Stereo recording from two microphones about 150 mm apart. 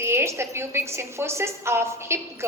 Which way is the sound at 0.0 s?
15° right (ahead or behind).